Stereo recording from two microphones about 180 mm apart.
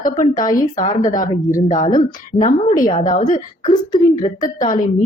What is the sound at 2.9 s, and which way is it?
Speech, 50° left (ahead or behind).